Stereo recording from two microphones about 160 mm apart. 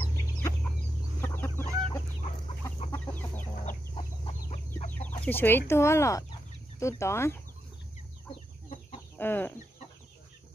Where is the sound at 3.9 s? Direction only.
40° left (ahead or behind).